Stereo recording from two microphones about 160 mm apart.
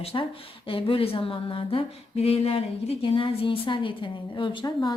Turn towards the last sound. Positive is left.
turn(degrees=30)  # may be behind; listen again after turning